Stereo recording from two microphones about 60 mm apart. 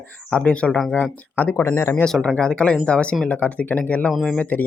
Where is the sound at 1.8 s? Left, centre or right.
Left.